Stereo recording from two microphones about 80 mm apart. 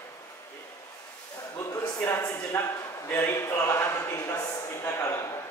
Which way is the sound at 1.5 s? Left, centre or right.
Left.